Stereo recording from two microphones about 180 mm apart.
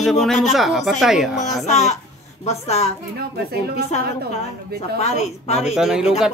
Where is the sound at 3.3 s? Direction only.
65° right (ahead or behind).